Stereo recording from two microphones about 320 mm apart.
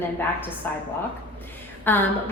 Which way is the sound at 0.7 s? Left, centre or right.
Centre.